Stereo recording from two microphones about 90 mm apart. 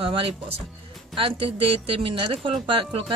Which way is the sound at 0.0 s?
90° right.